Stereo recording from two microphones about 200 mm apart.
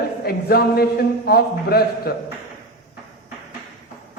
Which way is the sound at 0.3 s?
50° left (ahead or behind).